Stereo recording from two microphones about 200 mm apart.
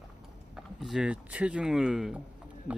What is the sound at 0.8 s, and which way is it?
Speech, 5° right (ahead or behind).